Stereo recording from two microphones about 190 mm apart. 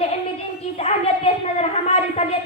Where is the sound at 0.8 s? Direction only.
35° left (ahead or behind).